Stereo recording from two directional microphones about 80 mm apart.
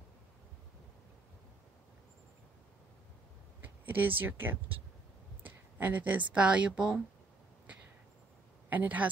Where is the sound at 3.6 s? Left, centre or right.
Right.